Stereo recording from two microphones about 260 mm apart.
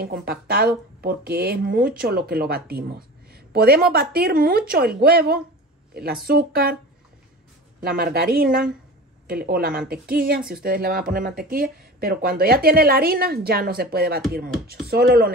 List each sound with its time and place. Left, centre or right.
0.0 s speech: right
7.8 s speech: right